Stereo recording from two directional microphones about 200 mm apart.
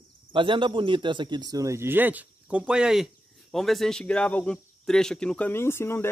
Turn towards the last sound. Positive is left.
turn(degrees=10)  # may be behind; listen again after turning